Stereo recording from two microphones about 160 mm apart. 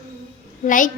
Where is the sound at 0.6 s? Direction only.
55° left (ahead or behind).